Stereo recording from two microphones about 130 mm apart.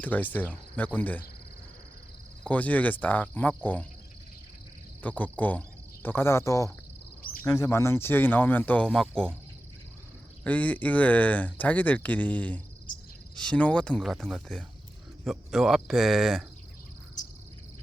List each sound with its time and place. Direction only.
0.0 s speech: 15° left (ahead or behind)
2.4 s speech: 10° left (ahead or behind)
5.0 s speech: 10° left (ahead or behind)
10.4 s speech: 10° left (ahead or behind)